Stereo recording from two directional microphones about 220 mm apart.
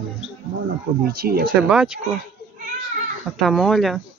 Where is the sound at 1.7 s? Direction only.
5° right (ahead or behind).